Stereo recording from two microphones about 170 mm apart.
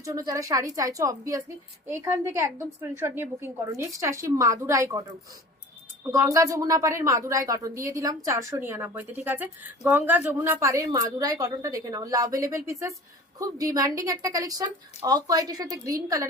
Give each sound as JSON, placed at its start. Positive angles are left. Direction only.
{"t": 0.0, "sound": "a woman's voice", "side_deg": -20}
{"t": 6.1, "sound": "a woman's voice", "side_deg": -15}